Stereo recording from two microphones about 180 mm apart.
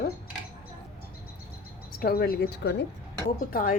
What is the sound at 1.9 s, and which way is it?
Speech, 55° left (ahead or behind).